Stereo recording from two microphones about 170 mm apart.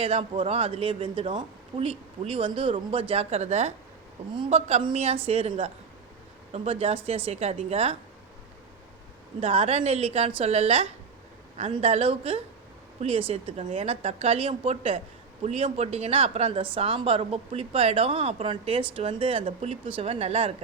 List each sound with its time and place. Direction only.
0.0 s speech: 35° right (ahead or behind)
9.4 s speech: 35° right (ahead or behind)